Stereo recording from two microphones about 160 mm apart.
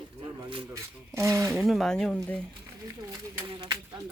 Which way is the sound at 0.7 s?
20° right (ahead or behind).